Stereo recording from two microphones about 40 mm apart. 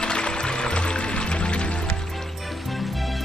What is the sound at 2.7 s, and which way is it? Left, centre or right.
Music, centre.